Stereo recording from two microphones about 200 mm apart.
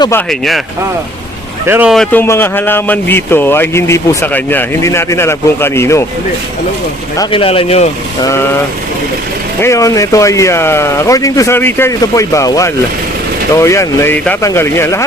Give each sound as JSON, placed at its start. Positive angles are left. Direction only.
{"t": 0.3, "sound": "speech", "side_deg": 0}
{"t": 1.6, "sound": "speech", "side_deg": -10}
{"t": 2.2, "sound": "a man's voice", "side_deg": 10}
{"t": 7.2, "sound": "a man's voice", "side_deg": 25}
{"t": 8.2, "sound": "a man's voice", "side_deg": 15}
{"t": 9.6, "sound": "a man's voice", "side_deg": 15}